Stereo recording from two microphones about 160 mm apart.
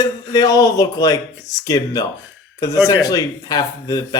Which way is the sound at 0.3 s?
25° left (ahead or behind).